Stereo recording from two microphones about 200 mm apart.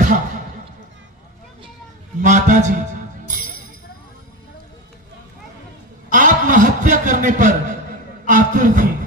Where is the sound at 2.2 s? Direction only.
40° right (ahead or behind).